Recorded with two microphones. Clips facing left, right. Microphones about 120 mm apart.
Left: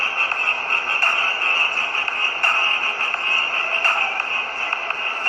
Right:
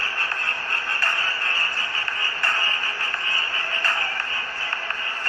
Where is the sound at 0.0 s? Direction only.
50° left (ahead or behind).